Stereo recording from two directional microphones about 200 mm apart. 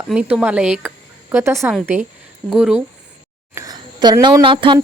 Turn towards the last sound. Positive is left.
turn(degrees=-25)  # may be behind; listen again after turning